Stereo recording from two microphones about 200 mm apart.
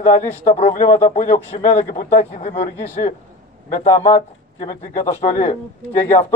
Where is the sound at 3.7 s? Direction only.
35° left (ahead or behind).